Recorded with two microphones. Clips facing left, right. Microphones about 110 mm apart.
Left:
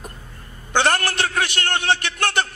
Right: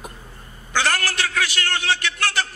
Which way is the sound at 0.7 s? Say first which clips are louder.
Left 3 dB; 25° left (ahead or behind).